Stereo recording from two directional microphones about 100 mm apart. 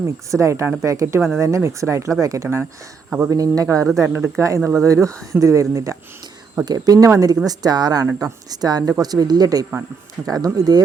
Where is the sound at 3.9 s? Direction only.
25° right (ahead or behind).